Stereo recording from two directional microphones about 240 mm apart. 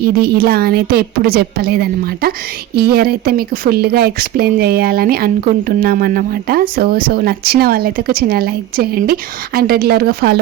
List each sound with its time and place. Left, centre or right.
0.0 s speech: right